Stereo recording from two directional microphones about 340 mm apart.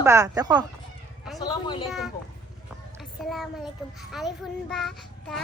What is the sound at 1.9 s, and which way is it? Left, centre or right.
Child singing, centre.